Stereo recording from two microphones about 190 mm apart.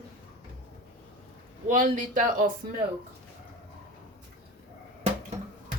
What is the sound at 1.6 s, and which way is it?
Speech, 45° right (ahead or behind).